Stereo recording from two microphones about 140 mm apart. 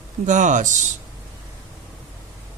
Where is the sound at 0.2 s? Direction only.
60° right (ahead or behind).